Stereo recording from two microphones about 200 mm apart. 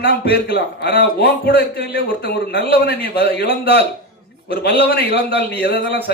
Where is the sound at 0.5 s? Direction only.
55° left (ahead or behind).